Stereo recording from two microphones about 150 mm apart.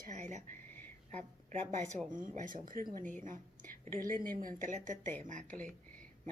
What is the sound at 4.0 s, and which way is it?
A woman's voice, 65° right (ahead or behind).